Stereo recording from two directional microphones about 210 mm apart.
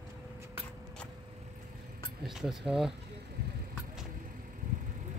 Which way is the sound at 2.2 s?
Centre (ahead or behind).